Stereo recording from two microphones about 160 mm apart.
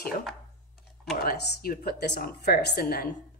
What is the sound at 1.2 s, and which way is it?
Speech, 70° left (ahead or behind).